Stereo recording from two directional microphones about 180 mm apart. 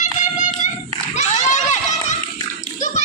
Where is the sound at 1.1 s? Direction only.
40° left (ahead or behind).